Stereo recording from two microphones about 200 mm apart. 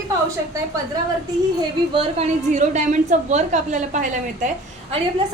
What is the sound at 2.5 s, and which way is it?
A woman's voice, 35° right (ahead or behind).